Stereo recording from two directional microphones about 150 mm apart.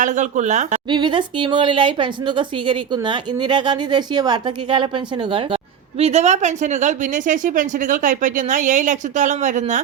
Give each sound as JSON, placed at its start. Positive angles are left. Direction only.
{"t": 0.0, "sound": "speech", "side_deg": -55}
{"t": 0.9, "sound": "speech", "side_deg": -30}
{"t": 6.0, "sound": "speech", "side_deg": -45}